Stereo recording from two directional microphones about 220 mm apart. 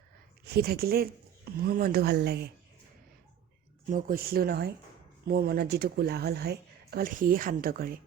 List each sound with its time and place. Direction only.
0.4 s speech: 45° right (ahead or behind)
3.8 s speech: 40° right (ahead or behind)